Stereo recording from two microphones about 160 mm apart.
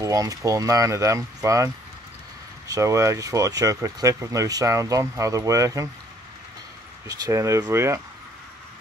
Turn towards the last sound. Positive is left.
turn(degrees=-15)  # may be behind; listen again after turning